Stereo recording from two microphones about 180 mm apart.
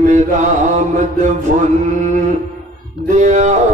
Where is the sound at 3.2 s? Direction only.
40° right (ahead or behind).